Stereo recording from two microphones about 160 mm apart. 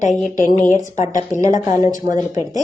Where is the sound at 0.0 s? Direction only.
50° left (ahead or behind).